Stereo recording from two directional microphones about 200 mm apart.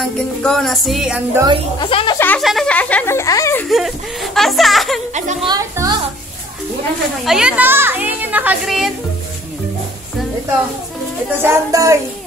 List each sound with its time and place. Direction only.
0.0 s music: centre (ahead or behind)
1.8 s speech: 25° left (ahead or behind)
2.1 s speech: 10° left (ahead or behind)
3.6 s music: centre (ahead or behind)
5.1 s a woman's voice: 35° right (ahead or behind)
5.5 s a woman's voice: 20° right (ahead or behind)
7.2 s speech: 5° right (ahead or behind)
11.3 s speech: 15° right (ahead or behind)